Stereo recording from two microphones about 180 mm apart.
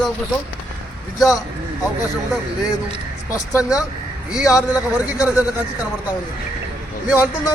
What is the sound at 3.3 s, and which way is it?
Speech, 15° left (ahead or behind).